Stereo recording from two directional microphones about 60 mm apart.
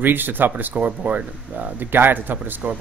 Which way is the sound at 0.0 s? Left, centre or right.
Right.